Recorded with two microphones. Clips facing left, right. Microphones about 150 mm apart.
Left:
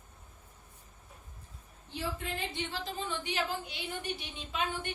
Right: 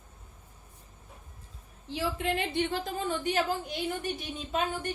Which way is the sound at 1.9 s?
90° right.